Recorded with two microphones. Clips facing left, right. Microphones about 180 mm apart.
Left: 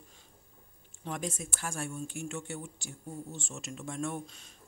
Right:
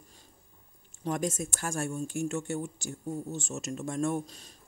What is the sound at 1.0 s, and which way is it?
Speech, 45° right (ahead or behind).